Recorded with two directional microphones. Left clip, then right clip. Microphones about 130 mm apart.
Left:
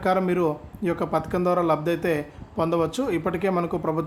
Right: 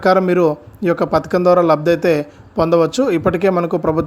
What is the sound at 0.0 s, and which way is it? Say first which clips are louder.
Speech: right 9 dB; 50° right (ahead or behind).